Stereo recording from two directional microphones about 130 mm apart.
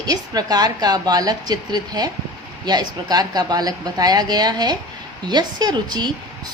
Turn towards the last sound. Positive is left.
turn(degrees=-35)  # may be behind; listen again after turning